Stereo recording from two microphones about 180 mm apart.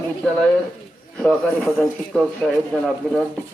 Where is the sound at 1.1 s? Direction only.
5° left (ahead or behind).